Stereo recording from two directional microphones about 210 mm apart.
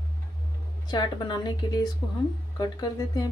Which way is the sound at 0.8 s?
20° left (ahead or behind).